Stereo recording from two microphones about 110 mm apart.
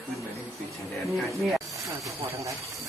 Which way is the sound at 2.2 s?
30° right (ahead or behind).